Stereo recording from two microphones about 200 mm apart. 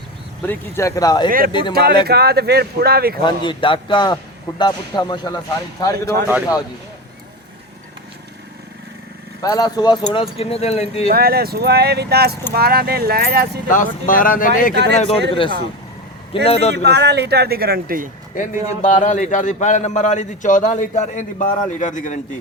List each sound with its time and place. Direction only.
0.4 s speech: 15° left (ahead or behind)
1.7 s a man's voice: 55° right (ahead or behind)
3.2 s a man's voice: 25° left (ahead or behind)
9.4 s a man's voice: 20° left (ahead or behind)
11.1 s a man's voice: 50° right (ahead or behind)
13.7 s speech: 40° left (ahead or behind)
14.7 s speech: 55° right (ahead or behind)
15.3 s a man's voice: 25° left (ahead or behind)
16.7 s a man's voice: 55° right (ahead or behind)
18.3 s a man's voice: 40° left (ahead or behind)